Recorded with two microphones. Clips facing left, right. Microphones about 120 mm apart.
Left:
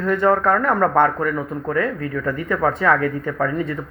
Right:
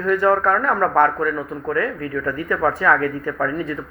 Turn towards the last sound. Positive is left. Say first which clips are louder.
# left 1 dB
turn(degrees=25)  # may be behind; listen again after turning